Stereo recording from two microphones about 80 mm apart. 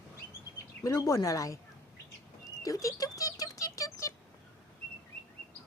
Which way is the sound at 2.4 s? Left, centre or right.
Left.